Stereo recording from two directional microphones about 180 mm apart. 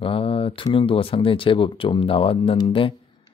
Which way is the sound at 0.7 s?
30° left (ahead or behind).